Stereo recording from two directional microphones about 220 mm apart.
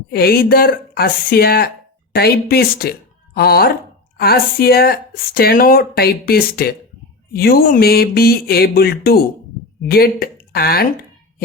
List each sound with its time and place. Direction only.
0.1 s speech: 45° left (ahead or behind)